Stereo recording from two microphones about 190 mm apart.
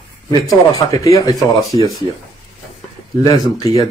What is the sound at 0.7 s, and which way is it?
Speech, 15° left (ahead or behind).